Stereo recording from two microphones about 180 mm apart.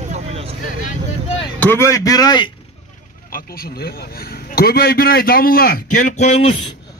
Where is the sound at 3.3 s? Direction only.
55° left (ahead or behind).